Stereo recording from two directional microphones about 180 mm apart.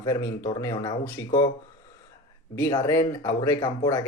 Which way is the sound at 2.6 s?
15° left (ahead or behind).